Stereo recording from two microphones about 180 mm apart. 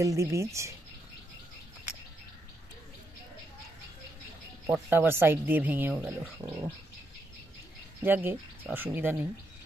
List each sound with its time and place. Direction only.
0.0 s speech: 15° right (ahead or behind)
4.6 s speech: 5° right (ahead or behind)
8.0 s speech: 10° right (ahead or behind)